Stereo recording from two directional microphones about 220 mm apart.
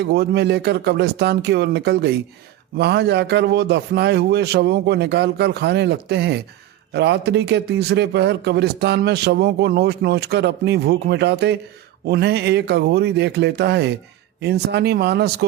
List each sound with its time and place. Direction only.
0.1 s speech: 50° right (ahead or behind)